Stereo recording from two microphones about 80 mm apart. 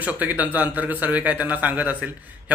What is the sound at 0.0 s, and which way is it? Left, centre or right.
A man's voice, right.